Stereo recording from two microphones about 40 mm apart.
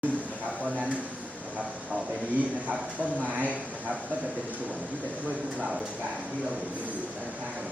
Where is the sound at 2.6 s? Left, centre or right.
Right.